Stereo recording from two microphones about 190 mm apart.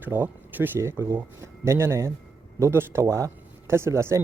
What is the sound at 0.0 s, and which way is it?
Speech, 10° right (ahead or behind).